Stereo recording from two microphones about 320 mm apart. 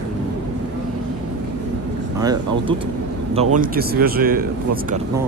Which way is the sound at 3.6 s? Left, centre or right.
Right.